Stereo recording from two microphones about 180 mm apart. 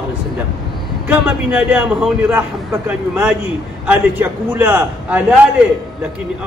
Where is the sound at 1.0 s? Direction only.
5° right (ahead or behind).